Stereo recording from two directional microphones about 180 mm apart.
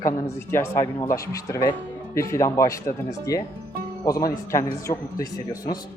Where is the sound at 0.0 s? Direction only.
15° left (ahead or behind).